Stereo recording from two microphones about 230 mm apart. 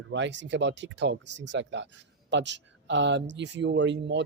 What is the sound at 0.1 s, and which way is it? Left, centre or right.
Speech, right.